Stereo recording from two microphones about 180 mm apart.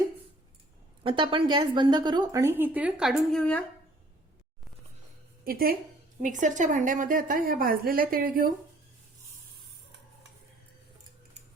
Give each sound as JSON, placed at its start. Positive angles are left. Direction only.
{"t": 1.0, "sound": "speech", "side_deg": -30}
{"t": 5.5, "sound": "a woman's voice", "side_deg": -55}
{"t": 6.2, "sound": "a woman's voice", "side_deg": -45}